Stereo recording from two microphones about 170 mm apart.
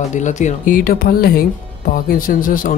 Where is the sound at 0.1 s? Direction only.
45° left (ahead or behind).